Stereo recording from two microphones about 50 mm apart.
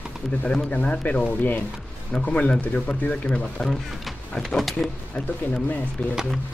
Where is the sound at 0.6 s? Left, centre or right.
Left.